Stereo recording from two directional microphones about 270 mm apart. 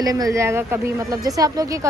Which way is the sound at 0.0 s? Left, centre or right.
Centre.